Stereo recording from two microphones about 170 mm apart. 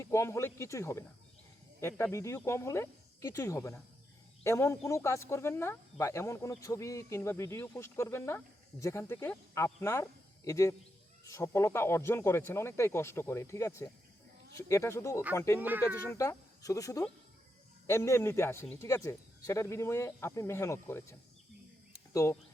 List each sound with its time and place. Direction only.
0.0 s speech: 15° left (ahead or behind)
15.5 s speech: 10° right (ahead or behind)
16.1 s speech: 20° left (ahead or behind)